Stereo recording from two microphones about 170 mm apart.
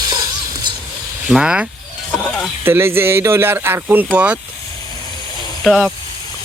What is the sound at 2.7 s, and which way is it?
Speech, 15° right (ahead or behind).